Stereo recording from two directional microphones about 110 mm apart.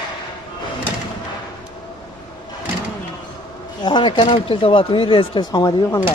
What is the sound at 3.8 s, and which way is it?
Speech, 45° left (ahead or behind).